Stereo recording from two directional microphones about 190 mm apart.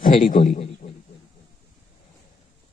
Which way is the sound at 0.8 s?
45° left (ahead or behind).